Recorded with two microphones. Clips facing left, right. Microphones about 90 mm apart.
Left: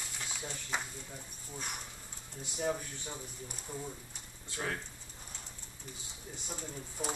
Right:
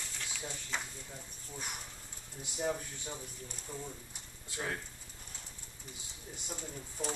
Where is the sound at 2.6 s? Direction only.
10° left (ahead or behind).